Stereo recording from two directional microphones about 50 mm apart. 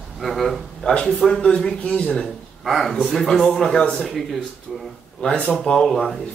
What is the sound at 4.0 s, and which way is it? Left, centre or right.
Speech, centre.